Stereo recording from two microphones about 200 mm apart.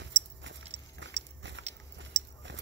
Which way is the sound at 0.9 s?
65° right (ahead or behind).